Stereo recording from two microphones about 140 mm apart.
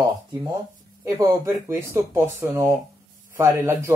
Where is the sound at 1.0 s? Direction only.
20° right (ahead or behind).